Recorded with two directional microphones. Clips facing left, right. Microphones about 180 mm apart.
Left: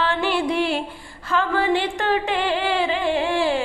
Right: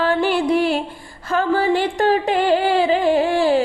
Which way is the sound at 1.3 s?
40° right (ahead or behind).